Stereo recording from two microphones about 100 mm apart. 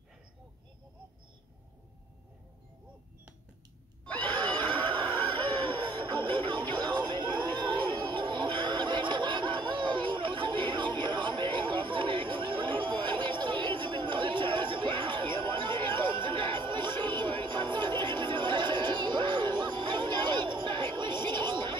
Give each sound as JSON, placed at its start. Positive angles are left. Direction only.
{"t": 4.0, "sound": "a sound", "side_deg": 15}
{"t": 4.5, "sound": "neigh", "side_deg": 15}
{"t": 4.8, "sound": "music", "side_deg": -50}
{"t": 7.8, "sound": "snicker", "side_deg": -50}